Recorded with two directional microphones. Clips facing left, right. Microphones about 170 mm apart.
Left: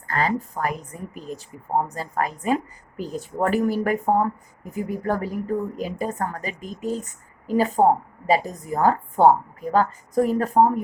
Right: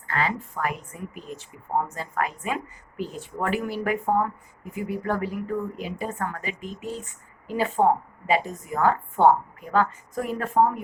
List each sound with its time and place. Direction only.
0.1 s speech: 40° left (ahead or behind)